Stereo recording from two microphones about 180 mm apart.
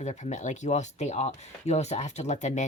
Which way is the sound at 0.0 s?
40° left (ahead or behind).